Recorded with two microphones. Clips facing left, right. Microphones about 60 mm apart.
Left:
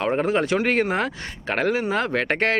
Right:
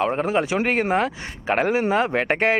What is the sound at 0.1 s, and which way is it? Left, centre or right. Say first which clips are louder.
Speech: left 1 dB; centre.